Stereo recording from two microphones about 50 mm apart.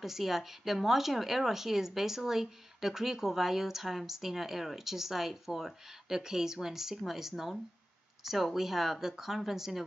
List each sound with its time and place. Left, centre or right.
0.0 s speech: centre